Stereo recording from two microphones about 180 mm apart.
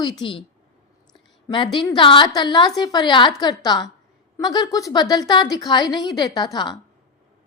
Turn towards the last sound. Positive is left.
turn(degrees=25)  # may be behind; listen again after turning